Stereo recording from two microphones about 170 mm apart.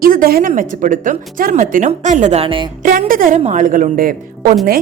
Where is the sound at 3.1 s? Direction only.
55° right (ahead or behind).